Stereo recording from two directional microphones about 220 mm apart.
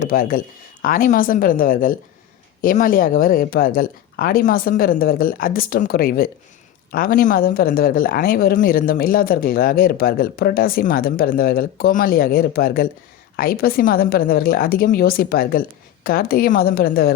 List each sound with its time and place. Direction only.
0.0 s a woman's voice: 40° left (ahead or behind)